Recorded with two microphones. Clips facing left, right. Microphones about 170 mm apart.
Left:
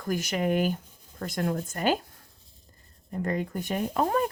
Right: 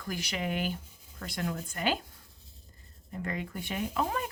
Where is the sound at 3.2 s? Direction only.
45° left (ahead or behind).